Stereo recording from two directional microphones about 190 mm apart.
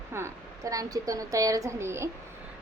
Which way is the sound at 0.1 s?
15° right (ahead or behind).